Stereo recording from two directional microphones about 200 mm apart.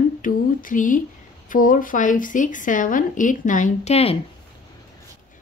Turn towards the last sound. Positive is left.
turn(degrees=30)  # may be behind; listen again after turning